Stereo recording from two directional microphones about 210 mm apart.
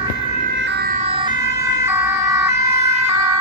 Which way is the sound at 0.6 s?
55° right (ahead or behind).